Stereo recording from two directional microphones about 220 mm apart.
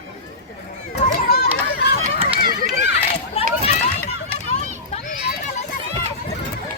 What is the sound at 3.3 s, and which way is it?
Run, 25° left (ahead or behind).